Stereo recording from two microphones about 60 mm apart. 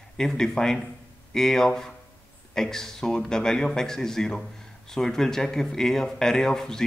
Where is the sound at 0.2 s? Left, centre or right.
Centre.